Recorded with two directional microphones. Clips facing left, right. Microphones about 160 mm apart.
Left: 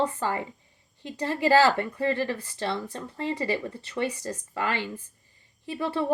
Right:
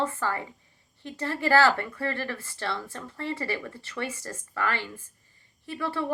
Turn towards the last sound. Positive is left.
turn(degrees=20)  # may be behind; listen again after turning